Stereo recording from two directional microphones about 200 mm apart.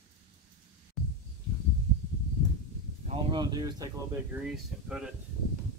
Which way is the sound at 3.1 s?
25° right (ahead or behind).